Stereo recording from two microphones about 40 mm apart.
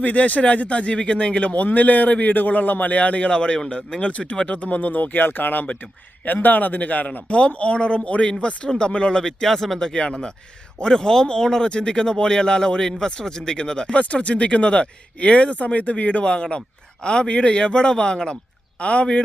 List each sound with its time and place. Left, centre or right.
0.0 s a man's voice: left
7.3 s speech: left
9.5 s speech: centre
9.7 s speech: centre
13.9 s a man's voice: left
16.2 s a man's voice: left